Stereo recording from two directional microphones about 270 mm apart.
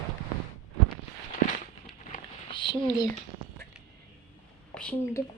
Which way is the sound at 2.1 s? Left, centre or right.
Left.